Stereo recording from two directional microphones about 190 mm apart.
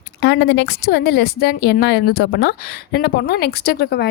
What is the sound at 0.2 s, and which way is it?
A woman's voice, 65° left (ahead or behind).